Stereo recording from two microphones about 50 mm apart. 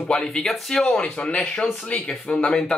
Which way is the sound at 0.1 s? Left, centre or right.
Centre.